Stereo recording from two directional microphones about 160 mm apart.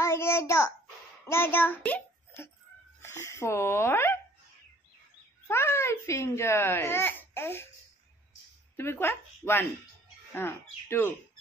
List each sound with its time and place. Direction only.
0.0 s a sound: 15° left (ahead or behind)
1.2 s a child's voice: 15° left (ahead or behind)
5.5 s speech: 15° left (ahead or behind)
8.7 s speech: 15° left (ahead or behind)